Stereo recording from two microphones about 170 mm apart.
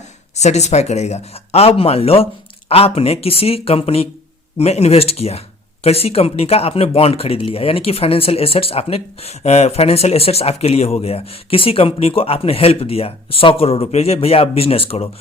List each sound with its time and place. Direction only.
0.3 s speech: 40° left (ahead or behind)